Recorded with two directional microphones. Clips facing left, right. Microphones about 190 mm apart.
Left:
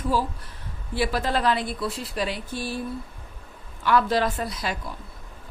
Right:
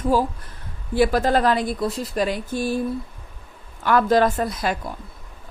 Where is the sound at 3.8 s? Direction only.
50° right (ahead or behind).